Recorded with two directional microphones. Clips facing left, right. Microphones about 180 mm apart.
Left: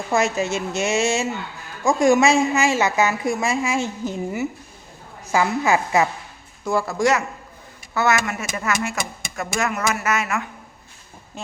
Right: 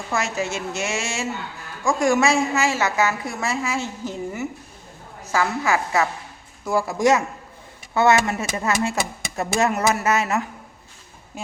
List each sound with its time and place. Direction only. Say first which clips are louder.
0.1 s a woman's voice: left 4 dB; 20° left (ahead or behind)
6.7 s speech: even; 10° right (ahead or behind)
7.9 s speech: right 3 dB; 30° right (ahead or behind)
11.4 s speech: even; 10° right (ahead or behind)